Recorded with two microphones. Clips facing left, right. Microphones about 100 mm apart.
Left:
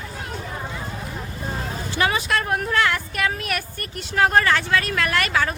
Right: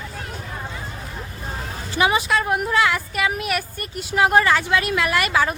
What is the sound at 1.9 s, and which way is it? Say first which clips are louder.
Speech: right 3 dB; 15° right (ahead or behind).